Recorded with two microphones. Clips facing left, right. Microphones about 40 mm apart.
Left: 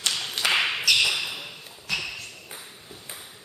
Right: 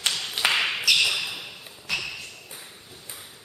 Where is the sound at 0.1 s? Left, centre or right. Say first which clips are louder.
Even; centre.